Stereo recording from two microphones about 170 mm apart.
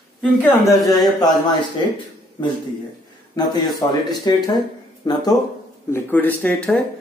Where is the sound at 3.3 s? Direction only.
25° left (ahead or behind).